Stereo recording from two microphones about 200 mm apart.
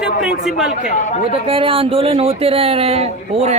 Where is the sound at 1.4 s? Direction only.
25° right (ahead or behind).